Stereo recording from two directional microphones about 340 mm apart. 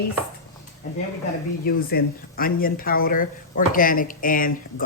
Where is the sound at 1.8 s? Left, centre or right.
Left.